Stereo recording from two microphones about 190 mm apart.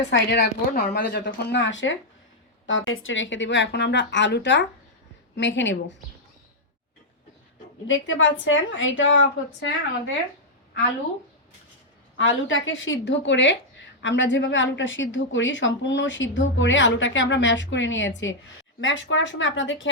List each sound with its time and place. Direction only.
0.1 s speech: 60° left (ahead or behind)
7.9 s a woman's voice: 90° left
12.1 s a woman's voice: 90° left